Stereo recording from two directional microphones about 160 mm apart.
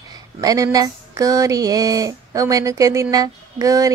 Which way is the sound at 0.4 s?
20° right (ahead or behind).